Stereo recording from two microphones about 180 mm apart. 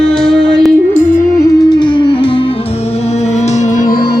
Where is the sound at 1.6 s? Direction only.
25° left (ahead or behind); by 4.2 s 55° left (ahead or behind).